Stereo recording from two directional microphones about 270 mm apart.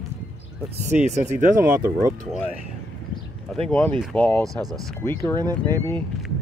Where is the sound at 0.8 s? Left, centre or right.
Right.